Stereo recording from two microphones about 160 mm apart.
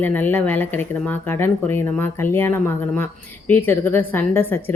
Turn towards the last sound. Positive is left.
turn(degrees=15)  # may be behind; listen again after turning